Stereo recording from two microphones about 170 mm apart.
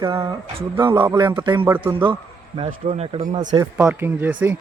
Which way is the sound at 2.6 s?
30° right (ahead or behind).